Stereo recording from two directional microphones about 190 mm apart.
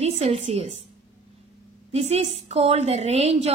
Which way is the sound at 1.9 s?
30° right (ahead or behind).